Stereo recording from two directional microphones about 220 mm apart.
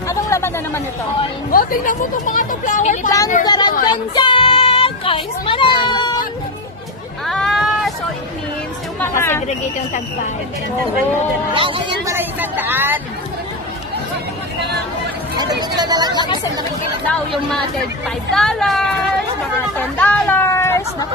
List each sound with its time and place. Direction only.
0.1 s chatter: 15° left (ahead or behind)
1.5 s speech: 40° left (ahead or behind)
3.4 s a sound: 20° left (ahead or behind)
3.9 s children playing: 20° left (ahead or behind)
7.2 s a sound: centre (ahead or behind)
9.0 s speech: 10° left (ahead or behind)
11.5 s speech: 25° right (ahead or behind)
12.1 s speech: 10° right (ahead or behind)
15.3 s speech: 20° right (ahead or behind)
16.2 s speech: 20° left (ahead or behind)
17.1 s speech: centre (ahead or behind)
20.0 s a sound: 5° left (ahead or behind)